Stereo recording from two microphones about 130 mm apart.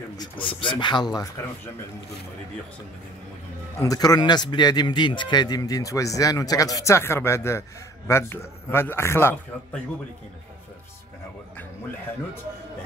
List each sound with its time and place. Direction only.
0.2 s speech: 40° left (ahead or behind)
3.8 s a man's voice: 30° left (ahead or behind)